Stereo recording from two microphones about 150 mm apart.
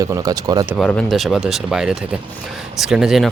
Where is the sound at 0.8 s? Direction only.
5° left (ahead or behind).